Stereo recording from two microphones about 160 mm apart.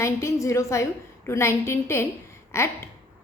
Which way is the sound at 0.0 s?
20° left (ahead or behind).